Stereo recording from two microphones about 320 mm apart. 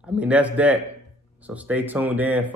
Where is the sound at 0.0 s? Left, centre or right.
Centre.